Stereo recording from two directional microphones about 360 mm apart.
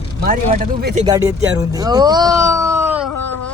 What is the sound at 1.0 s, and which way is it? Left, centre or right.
Speech, centre.